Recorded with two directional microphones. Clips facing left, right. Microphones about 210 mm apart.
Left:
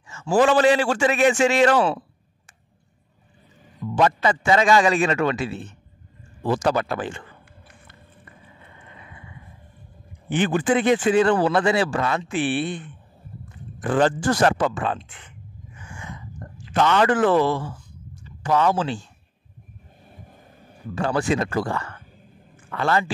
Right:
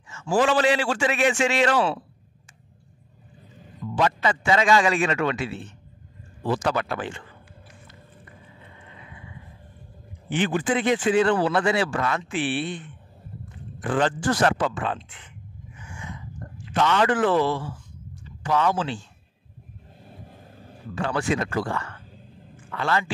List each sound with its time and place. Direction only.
0.1 s speech: 40° left (ahead or behind)
3.9 s a man's voice: 40° left (ahead or behind)
10.3 s speech: 50° left (ahead or behind); by 12.3 s 30° left (ahead or behind)
12.3 s speech: 50° left (ahead or behind)
16.7 s a man's voice: 45° left (ahead or behind)
20.9 s a man's voice: 40° left (ahead or behind)